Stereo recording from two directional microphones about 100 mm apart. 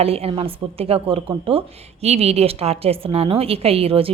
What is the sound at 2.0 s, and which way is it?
A woman's voice, 90° right.